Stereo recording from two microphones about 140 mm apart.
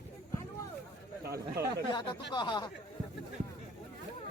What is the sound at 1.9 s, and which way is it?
Speech, 35° left (ahead or behind).